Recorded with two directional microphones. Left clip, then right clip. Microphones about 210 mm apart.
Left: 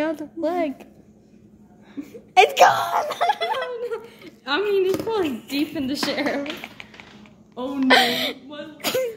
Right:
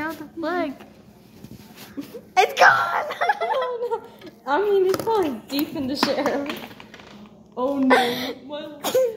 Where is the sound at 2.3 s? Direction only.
35° left (ahead or behind).